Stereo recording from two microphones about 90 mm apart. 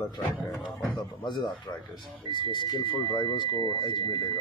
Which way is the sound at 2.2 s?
55° left (ahead or behind).